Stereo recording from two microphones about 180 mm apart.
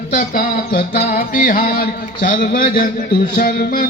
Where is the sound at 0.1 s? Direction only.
50° left (ahead or behind).